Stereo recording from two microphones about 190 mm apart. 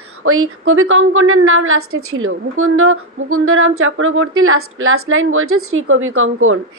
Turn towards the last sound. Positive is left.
turn(degrees=-90)